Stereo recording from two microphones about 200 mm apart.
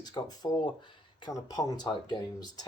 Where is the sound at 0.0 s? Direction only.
20° left (ahead or behind).